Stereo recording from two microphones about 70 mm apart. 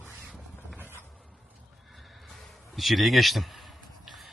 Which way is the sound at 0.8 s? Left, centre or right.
Right.